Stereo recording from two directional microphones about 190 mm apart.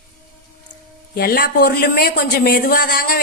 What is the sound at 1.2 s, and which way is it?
Speech, 55° left (ahead or behind).